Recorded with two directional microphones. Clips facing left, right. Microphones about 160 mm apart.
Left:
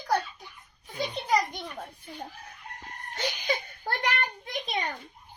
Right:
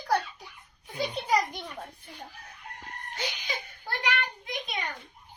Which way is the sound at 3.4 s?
60° left (ahead or behind).